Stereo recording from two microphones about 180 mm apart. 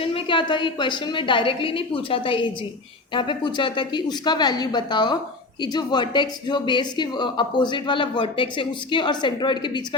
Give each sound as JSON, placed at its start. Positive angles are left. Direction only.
{"t": 0.0, "sound": "a woman's voice", "side_deg": 30}